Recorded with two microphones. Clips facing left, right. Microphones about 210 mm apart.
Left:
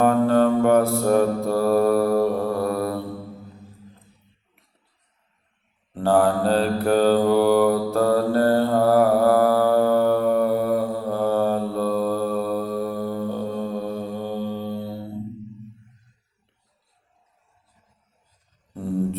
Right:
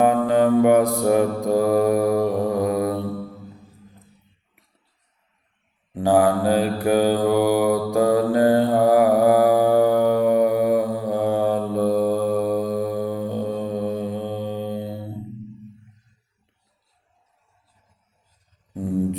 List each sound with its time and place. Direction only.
0.0 s mantra: 15° right (ahead or behind)
5.9 s mantra: 15° right (ahead or behind)
18.7 s a sound: 15° right (ahead or behind)